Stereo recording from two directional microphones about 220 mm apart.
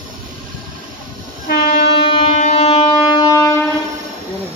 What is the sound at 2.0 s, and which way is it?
Train, 20° left (ahead or behind).